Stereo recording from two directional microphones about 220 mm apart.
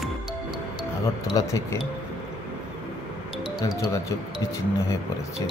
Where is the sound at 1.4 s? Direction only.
15° left (ahead or behind).